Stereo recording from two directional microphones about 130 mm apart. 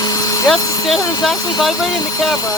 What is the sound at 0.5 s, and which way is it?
Speech, 30° left (ahead or behind).